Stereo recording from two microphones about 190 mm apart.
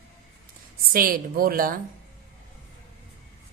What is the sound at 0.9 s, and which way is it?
Speech, 50° right (ahead or behind).